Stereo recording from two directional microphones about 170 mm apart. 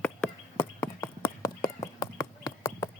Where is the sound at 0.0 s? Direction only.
10° left (ahead or behind).